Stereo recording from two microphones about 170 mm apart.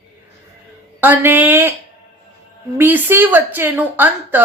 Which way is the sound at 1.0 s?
10° right (ahead or behind).